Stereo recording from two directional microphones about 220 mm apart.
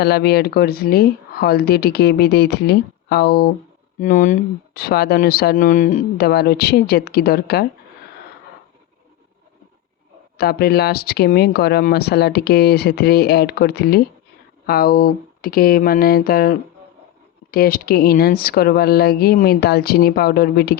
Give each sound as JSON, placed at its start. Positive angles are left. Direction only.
{"t": 0.0, "sound": "speech", "side_deg": 45}
{"t": 10.3, "sound": "speech", "side_deg": 45}